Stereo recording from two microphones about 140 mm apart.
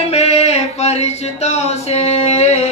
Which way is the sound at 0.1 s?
50° left (ahead or behind).